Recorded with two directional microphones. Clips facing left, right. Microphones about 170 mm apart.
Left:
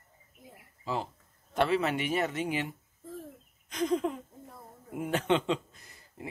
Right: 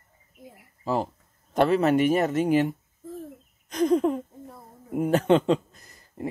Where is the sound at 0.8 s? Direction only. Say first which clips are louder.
Right 7 dB; 45° right (ahead or behind).